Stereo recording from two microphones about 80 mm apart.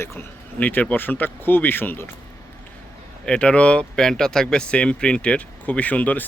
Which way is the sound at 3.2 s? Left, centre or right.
Centre.